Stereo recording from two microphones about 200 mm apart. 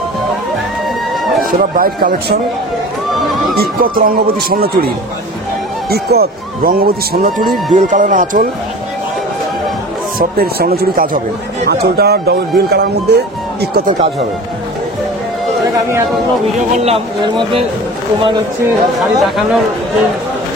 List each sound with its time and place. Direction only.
1.4 s speech: 45° right (ahead or behind)
3.3 s neigh: centre (ahead or behind)
3.5 s speech: 45° right (ahead or behind)
10.1 s speech: 50° right (ahead or behind)
16.7 s speech: 30° right (ahead or behind)
18.9 s speech: centre (ahead or behind)